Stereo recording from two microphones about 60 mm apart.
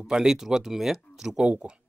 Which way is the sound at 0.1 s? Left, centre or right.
Centre.